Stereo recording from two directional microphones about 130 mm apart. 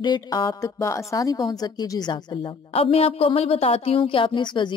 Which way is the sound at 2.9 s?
50° left (ahead or behind).